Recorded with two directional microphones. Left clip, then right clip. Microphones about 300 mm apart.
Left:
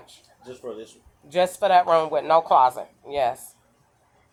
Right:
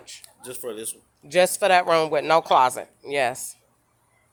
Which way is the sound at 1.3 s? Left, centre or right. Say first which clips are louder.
Right 1 dB; right.